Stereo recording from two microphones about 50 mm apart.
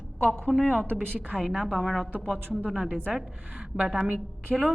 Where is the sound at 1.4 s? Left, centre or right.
Centre.